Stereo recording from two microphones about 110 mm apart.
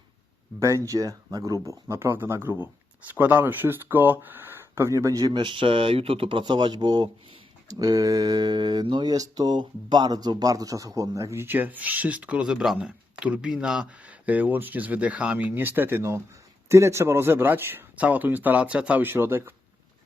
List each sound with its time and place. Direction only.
0.6 s speech: 30° right (ahead or behind)